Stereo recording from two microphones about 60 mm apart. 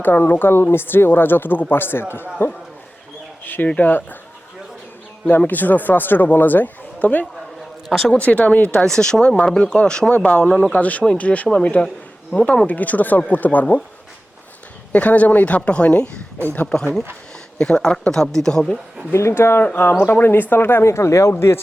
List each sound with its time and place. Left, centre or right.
0.0 s speech: left
3.4 s speech: left
5.5 s speech: left
7.9 s speech: centre
8.2 s speech: left
14.9 s speech: left
16.6 s speech: centre
19.1 s speech: left